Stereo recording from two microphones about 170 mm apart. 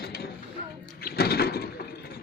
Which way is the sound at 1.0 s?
65° left (ahead or behind).